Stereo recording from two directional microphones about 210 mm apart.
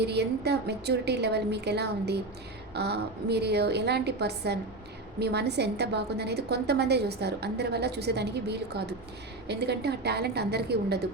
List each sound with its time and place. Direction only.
0.0 s a woman's voice: 50° right (ahead or behind)